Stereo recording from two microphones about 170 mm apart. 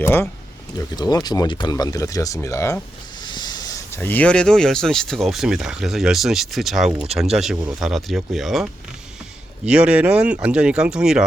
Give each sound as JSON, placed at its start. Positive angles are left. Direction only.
{"t": 0.0, "sound": "speech", "side_deg": 15}
{"t": 9.6, "sound": "speech", "side_deg": -5}